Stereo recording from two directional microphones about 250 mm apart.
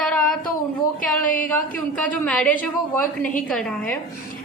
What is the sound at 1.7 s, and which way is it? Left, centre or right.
A woman's voice, centre.